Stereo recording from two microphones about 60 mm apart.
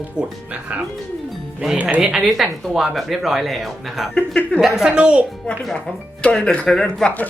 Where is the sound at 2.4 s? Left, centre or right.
Centre.